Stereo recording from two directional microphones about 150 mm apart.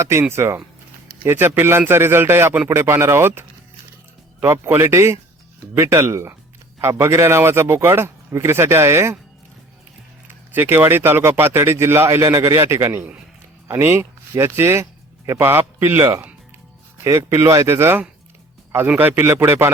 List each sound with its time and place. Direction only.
0.0 s speech: 15° right (ahead or behind)
10.5 s speech: 15° right (ahead or behind)